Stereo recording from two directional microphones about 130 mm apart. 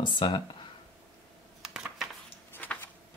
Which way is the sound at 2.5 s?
15° left (ahead or behind).